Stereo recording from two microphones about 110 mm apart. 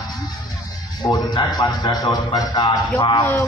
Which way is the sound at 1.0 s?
35° left (ahead or behind).